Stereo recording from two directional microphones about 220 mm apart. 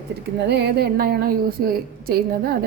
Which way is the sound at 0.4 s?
50° right (ahead or behind).